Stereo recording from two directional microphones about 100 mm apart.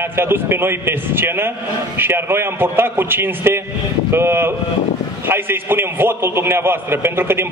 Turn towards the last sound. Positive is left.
turn(degrees=-25)  # may be behind; listen again after turning